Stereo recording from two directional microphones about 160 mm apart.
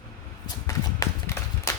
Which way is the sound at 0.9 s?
15° left (ahead or behind).